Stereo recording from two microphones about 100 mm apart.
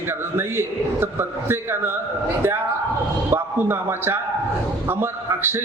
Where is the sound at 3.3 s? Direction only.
20° right (ahead or behind).